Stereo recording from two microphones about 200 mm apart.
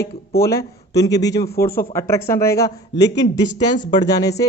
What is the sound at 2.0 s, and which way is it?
Speech, 15° left (ahead or behind).